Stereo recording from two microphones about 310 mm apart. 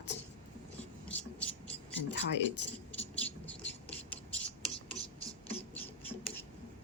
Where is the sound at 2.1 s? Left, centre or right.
Left.